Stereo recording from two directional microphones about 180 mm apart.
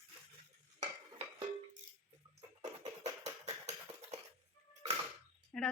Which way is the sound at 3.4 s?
40° right (ahead or behind).